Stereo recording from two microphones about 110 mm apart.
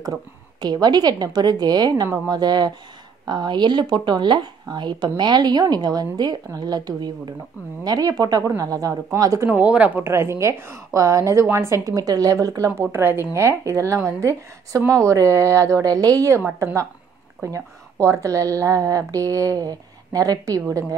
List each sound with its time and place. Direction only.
0.6 s speech: 40° right (ahead or behind)
9.5 s speech: 15° right (ahead or behind)
10.0 s a woman's voice: 25° right (ahead or behind)
12.8 s a woman's voice: 20° right (ahead or behind)